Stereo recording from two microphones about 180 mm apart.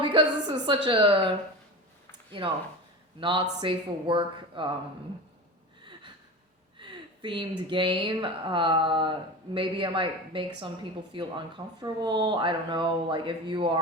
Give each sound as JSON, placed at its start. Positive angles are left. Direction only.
{"t": 0.0, "sound": "a sound", "side_deg": -25}
{"t": 0.9, "sound": "speech", "side_deg": -30}
{"t": 3.2, "sound": "speech", "side_deg": -25}
{"t": 6.7, "sound": "speech", "side_deg": -25}